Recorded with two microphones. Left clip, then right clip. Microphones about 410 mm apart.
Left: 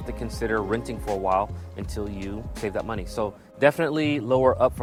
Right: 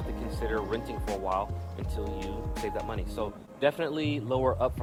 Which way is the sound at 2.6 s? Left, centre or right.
Left.